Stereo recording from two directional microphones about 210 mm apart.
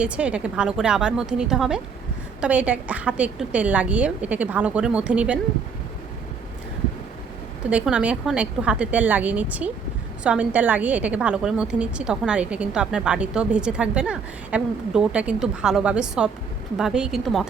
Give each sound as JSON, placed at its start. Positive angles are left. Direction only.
{"t": 0.0, "sound": "a woman's voice", "side_deg": -5}
{"t": 7.6, "sound": "a woman's voice", "side_deg": -5}